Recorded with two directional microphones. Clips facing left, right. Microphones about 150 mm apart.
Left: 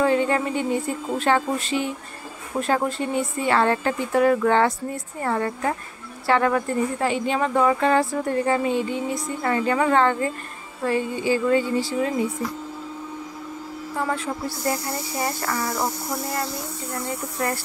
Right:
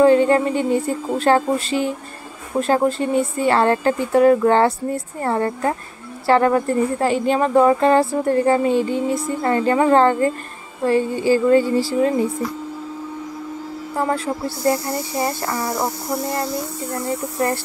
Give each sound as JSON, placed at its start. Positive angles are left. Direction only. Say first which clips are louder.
{"t": 0.0, "sound": "speech", "louder": "right 7 dB", "side_deg": -35}
{"t": 13.9, "sound": "speech", "louder": "right 5 dB", "side_deg": -35}
{"t": 16.9, "sound": "speech", "louder": "right 5 dB", "side_deg": -30}